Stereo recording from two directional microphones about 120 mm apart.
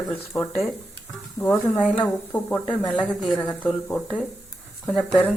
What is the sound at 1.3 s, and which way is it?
A woman's voice, 15° left (ahead or behind).